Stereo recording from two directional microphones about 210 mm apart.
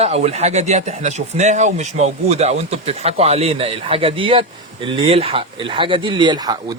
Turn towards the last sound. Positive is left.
turn(degrees=-20)  # may be behind; listen again after turning